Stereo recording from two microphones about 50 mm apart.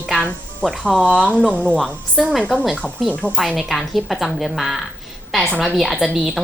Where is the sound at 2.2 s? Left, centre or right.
Centre.